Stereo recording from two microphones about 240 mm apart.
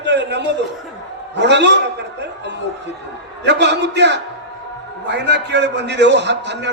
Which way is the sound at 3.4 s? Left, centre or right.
Right.